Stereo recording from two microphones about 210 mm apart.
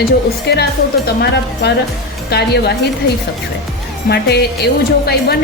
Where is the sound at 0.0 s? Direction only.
50° left (ahead or behind).